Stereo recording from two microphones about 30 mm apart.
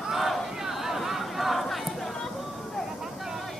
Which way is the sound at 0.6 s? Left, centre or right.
Centre.